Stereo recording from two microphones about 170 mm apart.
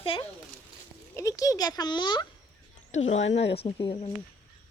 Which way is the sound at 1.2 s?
20° left (ahead or behind).